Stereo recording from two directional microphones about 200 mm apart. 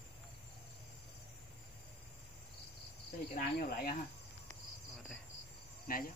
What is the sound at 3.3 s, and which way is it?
Cricket, 45° left (ahead or behind).